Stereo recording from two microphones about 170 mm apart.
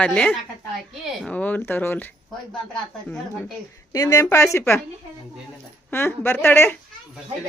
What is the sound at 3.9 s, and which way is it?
Speech, 20° left (ahead or behind).